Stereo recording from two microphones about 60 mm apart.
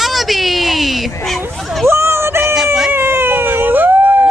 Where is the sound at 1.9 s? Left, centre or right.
Right.